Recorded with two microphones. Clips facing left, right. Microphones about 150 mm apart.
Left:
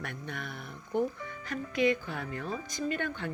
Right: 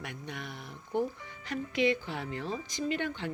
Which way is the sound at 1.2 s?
50° left (ahead or behind).